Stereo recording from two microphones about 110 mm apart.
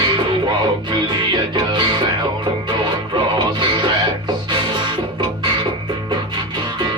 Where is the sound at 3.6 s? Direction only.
45° right (ahead or behind).